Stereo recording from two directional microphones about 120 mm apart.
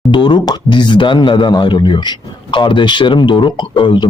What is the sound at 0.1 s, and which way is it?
Speech, 40° left (ahead or behind).